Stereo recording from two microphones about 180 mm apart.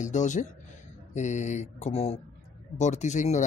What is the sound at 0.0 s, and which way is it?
A man's voice, 40° left (ahead or behind).